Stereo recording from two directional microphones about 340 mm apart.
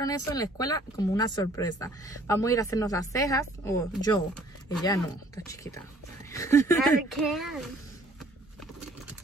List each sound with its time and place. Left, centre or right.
0.0 s a child's voice: centre